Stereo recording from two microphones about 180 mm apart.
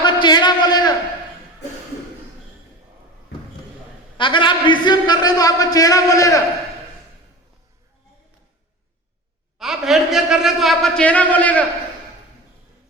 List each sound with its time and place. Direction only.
0.0 s a sound: 25° left (ahead or behind)
4.2 s a man's voice: 25° left (ahead or behind)
9.6 s a man's voice: centre (ahead or behind)